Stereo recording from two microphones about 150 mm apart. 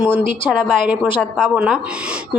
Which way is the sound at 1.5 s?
5° right (ahead or behind).